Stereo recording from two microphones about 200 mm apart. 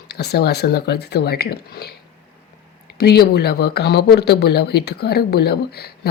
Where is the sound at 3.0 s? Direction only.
50° left (ahead or behind).